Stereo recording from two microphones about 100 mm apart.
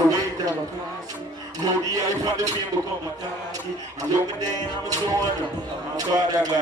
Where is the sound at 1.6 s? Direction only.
35° right (ahead or behind).